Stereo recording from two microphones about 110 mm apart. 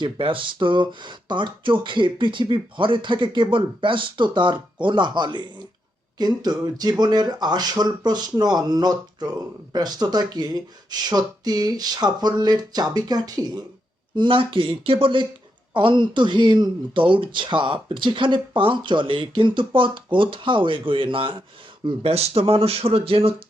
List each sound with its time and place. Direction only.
0.0 s speech: 50° right (ahead or behind); by 13.7 s 35° right (ahead or behind)
14.2 s speech: 50° right (ahead or behind)
21.8 s speech: 65° right (ahead or behind)